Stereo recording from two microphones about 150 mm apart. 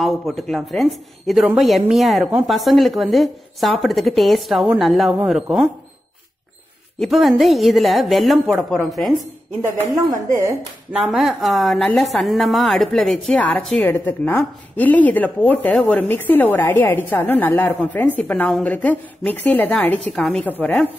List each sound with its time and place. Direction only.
0.0 s a woman's voice: centre (ahead or behind)
7.0 s a woman's voice: centre (ahead or behind)
9.8 s speech: 20° right (ahead or behind)
10.9 s a woman's voice: centre (ahead or behind)
13.8 s speech: 15° left (ahead or behind)